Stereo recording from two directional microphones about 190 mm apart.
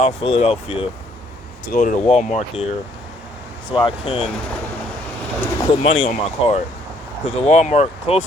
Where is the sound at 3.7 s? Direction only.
25° left (ahead or behind).